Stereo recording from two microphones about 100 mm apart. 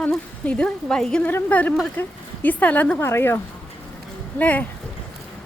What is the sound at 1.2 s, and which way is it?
A woman's voice, 15° left (ahead or behind).